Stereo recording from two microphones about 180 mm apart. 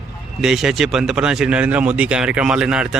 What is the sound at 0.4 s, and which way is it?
Speech, centre (ahead or behind).